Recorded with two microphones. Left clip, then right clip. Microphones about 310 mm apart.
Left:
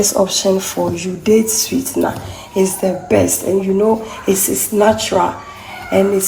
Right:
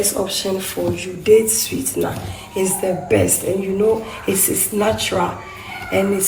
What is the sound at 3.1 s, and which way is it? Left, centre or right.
A woman's voice, left.